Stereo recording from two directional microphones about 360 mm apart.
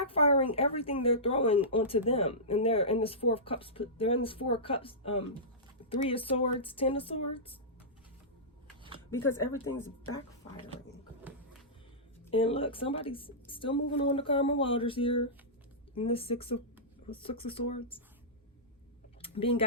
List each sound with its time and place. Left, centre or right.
0.0 s speech: centre
9.0 s speech: centre
12.3 s speech: centre
19.2 s speech: centre